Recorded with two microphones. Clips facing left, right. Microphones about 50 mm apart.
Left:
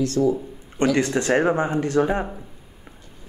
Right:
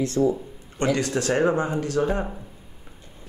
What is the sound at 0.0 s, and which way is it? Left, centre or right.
Speech, right.